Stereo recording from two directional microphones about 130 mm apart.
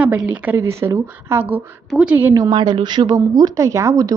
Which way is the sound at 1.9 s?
5° right (ahead or behind).